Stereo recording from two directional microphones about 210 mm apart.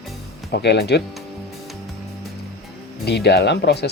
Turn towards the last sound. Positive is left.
turn(degrees=50)  # may be behind; listen again after turning